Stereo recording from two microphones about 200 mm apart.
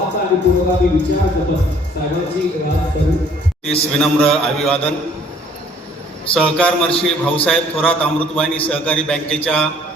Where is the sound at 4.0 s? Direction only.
5° left (ahead or behind).